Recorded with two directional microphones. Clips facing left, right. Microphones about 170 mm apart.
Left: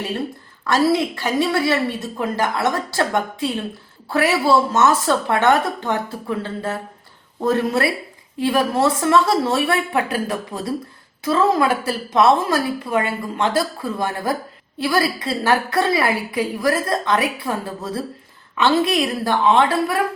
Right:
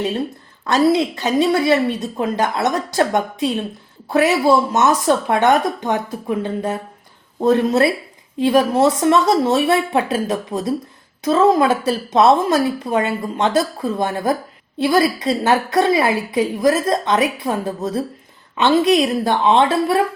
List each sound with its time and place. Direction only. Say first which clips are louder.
0.7 s a woman's voice: right 2 dB; 20° right (ahead or behind)